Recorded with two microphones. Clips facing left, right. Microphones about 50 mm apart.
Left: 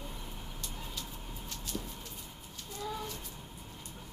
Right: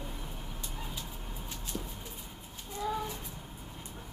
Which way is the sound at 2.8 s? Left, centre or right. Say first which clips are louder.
Right 5 dB; centre.